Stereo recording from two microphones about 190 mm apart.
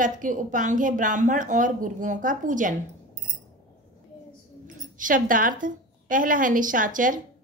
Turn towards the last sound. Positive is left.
turn(degrees=-45)  # may be behind; listen again after turning